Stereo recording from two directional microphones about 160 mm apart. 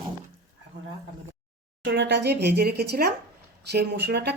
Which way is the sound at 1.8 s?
90° right.